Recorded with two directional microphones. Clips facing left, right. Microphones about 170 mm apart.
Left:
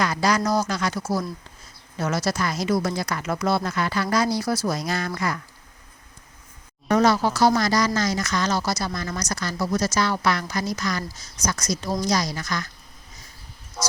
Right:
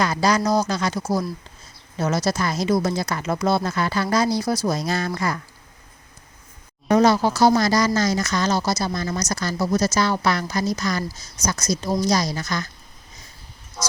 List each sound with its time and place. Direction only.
0.0 s speech: 25° right (ahead or behind)
6.8 s speech: 25° right (ahead or behind)